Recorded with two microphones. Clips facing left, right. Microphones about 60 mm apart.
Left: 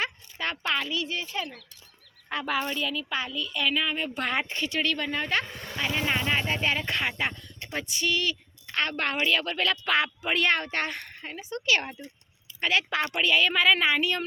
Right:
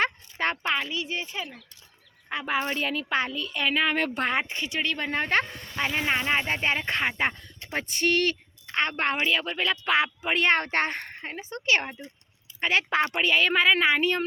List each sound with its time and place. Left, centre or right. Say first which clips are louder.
0.0 s a sound: right 5 dB; right
0.5 s a woman's voice: right 1 dB; right
1.4 s speech: left 2 dB; centre
2.3 s a woman's voice: right 1 dB; right
2.7 s speech: right 3 dB; right
3.8 s speech: right 5 dB; right
4.2 s a woman's voice: right 2 dB; right
5.7 s a woman's voice: right 2 dB; right
8.7 s a woman's voice: right 2 dB; right
10.6 s speech: right 4 dB; right